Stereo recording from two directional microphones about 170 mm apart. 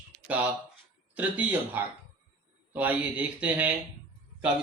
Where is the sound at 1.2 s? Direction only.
10° right (ahead or behind).